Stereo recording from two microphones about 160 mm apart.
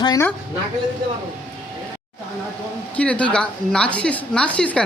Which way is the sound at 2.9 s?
10° left (ahead or behind).